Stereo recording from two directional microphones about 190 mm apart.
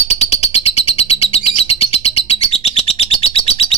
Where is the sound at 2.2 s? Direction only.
35° left (ahead or behind).